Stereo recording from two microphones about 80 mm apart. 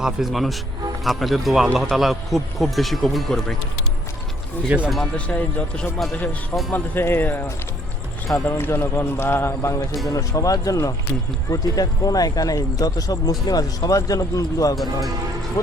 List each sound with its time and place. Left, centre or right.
0.0 s speech: centre
4.7 s speech: centre
5.1 s speech: centre
6.7 s speech: left
10.1 s speech: left